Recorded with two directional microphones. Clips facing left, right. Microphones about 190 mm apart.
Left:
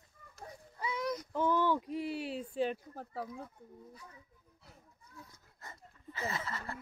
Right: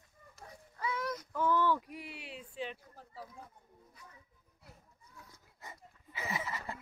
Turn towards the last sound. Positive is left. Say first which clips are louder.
# right 1 dB
turn(degrees=-15)  # may be behind; listen again after turning